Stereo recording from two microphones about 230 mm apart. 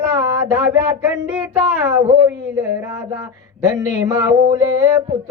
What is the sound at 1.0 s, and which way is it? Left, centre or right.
Speech, centre.